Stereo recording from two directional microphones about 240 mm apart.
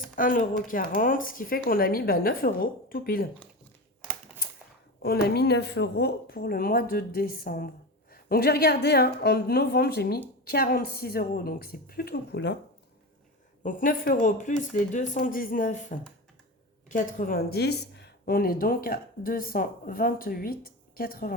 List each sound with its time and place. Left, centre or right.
0.2 s speech: left
5.0 s speech: left
13.6 s speech: left